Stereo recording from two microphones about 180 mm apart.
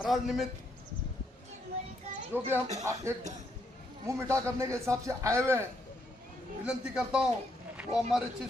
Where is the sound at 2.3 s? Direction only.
10° right (ahead or behind).